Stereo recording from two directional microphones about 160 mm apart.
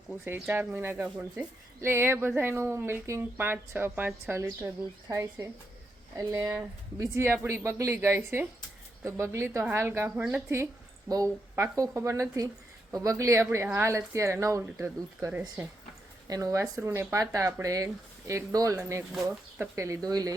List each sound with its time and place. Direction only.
0.3 s speech: 10° right (ahead or behind)